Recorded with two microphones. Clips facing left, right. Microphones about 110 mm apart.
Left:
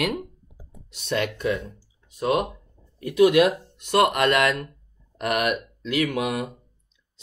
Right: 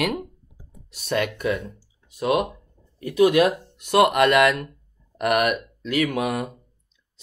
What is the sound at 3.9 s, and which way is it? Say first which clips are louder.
Speech: right 3 dB; 5° right (ahead or behind).